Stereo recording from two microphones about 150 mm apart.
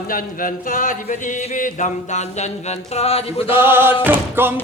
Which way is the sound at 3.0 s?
40° left (ahead or behind).